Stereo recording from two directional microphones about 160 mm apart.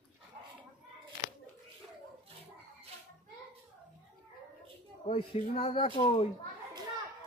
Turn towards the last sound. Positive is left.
turn(degrees=35)  # may be behind; listen again after turning